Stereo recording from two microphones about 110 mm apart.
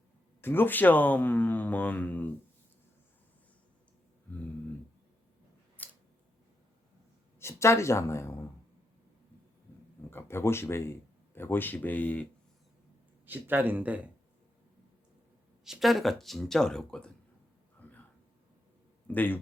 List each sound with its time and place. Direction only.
0.4 s speech: 20° left (ahead or behind)
5.7 s a sound: 15° left (ahead or behind)
7.3 s speech: 25° left (ahead or behind)
10.1 s speech: 20° left (ahead or behind)
13.2 s speech: 15° right (ahead or behind)
15.6 s speech: centre (ahead or behind)
17.8 s a sound: 15° left (ahead or behind)
19.0 s speech: 15° left (ahead or behind)